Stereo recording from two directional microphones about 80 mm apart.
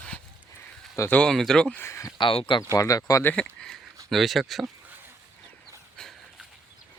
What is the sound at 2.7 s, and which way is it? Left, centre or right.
Speech, left.